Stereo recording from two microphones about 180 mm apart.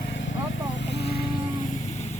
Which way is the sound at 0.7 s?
65° left (ahead or behind).